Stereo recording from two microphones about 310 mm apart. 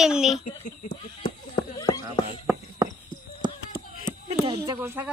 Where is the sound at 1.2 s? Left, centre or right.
Centre.